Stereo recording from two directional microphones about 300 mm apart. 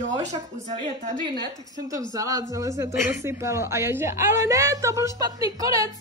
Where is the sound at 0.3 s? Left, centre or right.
Right.